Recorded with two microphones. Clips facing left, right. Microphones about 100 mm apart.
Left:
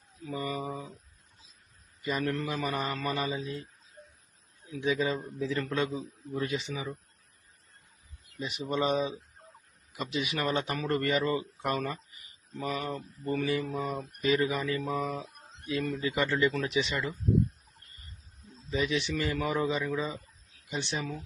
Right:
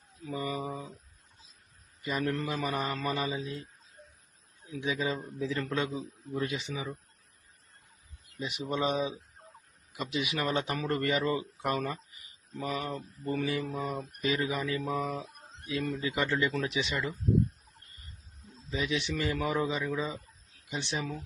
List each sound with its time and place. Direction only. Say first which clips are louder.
0.3 s speech: even; 15° right (ahead or behind)
2.0 s speech: left 1 dB; 5° right (ahead or behind)
4.8 s speech: left 3 dB; 15° right (ahead or behind)
8.4 s speech: left 1 dB; 15° right (ahead or behind)
14.8 s speech: even; centre (ahead or behind)
15.7 s speech: left 1 dB; 15° right (ahead or behind)
18.7 s speech: left 2 dB; 10° right (ahead or behind)